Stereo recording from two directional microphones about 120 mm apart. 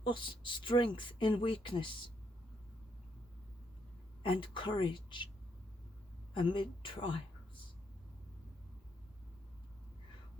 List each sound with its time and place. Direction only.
0.0 s speech: 45° left (ahead or behind)
4.2 s speech: 45° left (ahead or behind)
6.3 s a woman's voice: 45° left (ahead or behind)